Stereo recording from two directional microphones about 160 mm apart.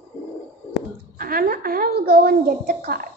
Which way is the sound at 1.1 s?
65° right (ahead or behind).